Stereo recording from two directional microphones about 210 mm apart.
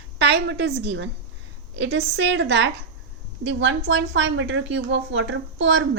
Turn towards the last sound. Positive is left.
turn(degrees=-60)  # may be behind; listen again after turning